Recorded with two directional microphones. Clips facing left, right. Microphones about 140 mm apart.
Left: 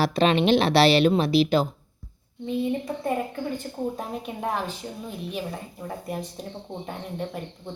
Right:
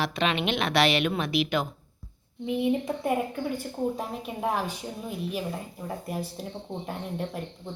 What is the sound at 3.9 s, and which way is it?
Speech, centre (ahead or behind).